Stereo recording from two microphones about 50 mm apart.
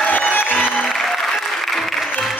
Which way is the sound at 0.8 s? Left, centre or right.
Centre.